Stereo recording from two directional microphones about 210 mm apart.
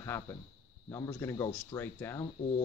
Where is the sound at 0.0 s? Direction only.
15° left (ahead or behind).